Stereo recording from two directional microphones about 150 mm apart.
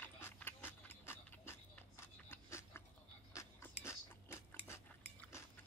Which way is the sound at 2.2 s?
15° left (ahead or behind).